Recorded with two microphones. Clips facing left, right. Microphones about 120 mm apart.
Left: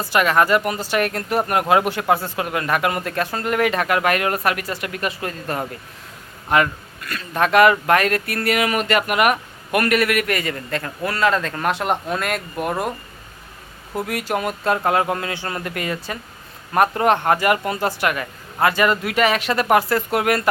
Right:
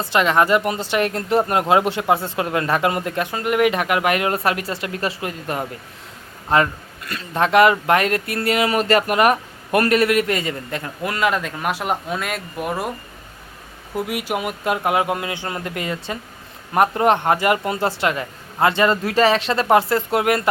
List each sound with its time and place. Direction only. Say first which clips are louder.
0.0 s speech: even; 25° right (ahead or behind)
5.2 s speech: even; 20° right (ahead or behind); by 12.9 s centre (ahead or behind)
13.9 s speech: even; 10° right (ahead or behind)